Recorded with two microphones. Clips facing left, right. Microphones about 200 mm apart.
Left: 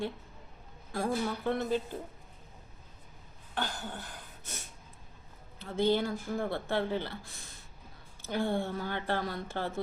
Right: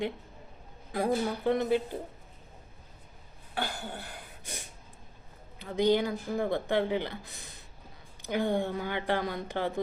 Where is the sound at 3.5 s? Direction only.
10° right (ahead or behind).